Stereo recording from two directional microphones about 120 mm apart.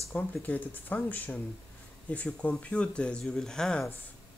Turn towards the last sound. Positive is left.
turn(degrees=5)  # may be behind; listen again after turning